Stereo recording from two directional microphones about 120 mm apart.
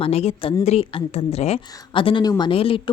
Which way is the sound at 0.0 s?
60° left (ahead or behind).